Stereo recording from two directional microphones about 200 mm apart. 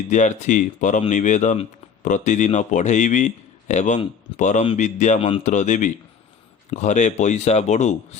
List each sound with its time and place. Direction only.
0.1 s a man's voice: 35° left (ahead or behind)